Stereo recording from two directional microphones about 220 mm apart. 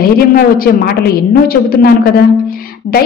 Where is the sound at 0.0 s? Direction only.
40° left (ahead or behind).